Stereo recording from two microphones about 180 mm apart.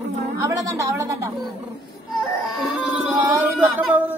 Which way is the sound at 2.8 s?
10° right (ahead or behind).